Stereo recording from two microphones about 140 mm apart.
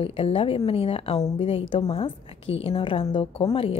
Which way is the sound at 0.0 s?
40° left (ahead or behind).